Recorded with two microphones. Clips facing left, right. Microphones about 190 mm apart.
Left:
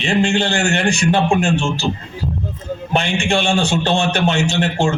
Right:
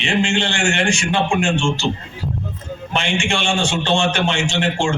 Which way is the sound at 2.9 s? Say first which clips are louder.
Left 3 dB; 35° left (ahead or behind).